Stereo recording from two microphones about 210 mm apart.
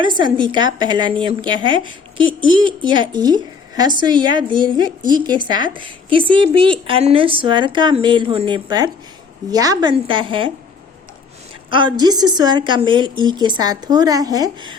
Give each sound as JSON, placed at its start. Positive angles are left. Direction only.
{"t": 0.2, "sound": "a woman's voice", "side_deg": -20}
{"t": 11.7, "sound": "a woman's voice", "side_deg": -20}